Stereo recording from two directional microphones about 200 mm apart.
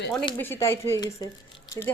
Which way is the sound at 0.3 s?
10° left (ahead or behind).